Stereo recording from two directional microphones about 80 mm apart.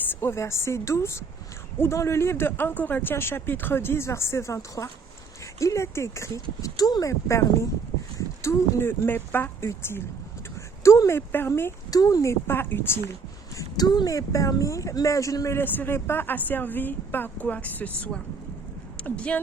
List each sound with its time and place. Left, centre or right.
0.0 s speech: left
11.9 s speech: left
13.6 s speech: left
15.5 s speech: left